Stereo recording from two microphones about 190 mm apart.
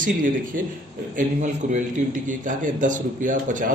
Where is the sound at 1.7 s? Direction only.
40° right (ahead or behind).